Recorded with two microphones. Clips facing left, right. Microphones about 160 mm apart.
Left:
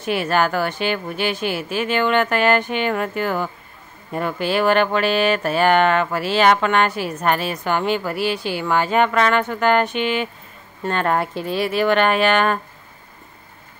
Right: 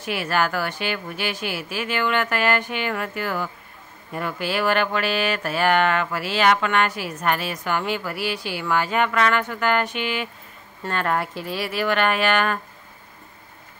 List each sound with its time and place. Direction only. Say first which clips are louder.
0.0 s speech: left 4 dB; 25° left (ahead or behind)